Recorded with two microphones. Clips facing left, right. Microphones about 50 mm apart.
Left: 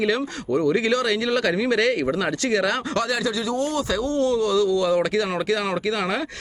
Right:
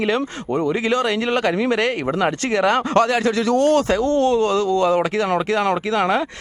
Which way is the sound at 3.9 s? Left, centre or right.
Right.